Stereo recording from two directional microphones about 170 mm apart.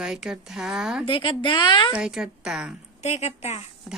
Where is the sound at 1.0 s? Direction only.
30° left (ahead or behind).